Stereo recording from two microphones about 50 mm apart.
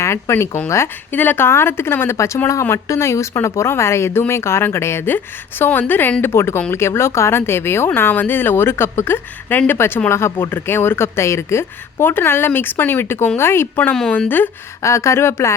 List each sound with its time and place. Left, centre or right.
0.0 s speech: left
1.1 s a woman's voice: left
1.5 s a woman's voice: left
2.1 s a woman's voice: left
5.0 s a woman's voice: left
6.2 s a woman's voice: left
9.7 s a woman's voice: left
10.5 s a woman's voice: left
14.8 s speech: left